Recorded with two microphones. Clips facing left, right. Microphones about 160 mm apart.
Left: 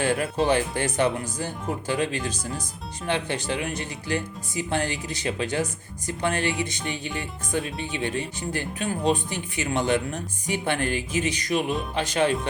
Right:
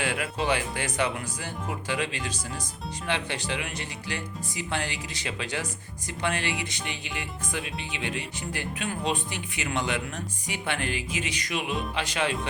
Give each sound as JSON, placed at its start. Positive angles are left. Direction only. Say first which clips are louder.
{"t": 0.0, "sound": "speech", "louder": "left 5 dB", "side_deg": 45}